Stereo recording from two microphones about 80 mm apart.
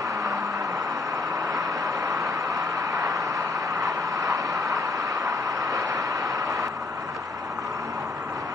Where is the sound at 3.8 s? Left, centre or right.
Right.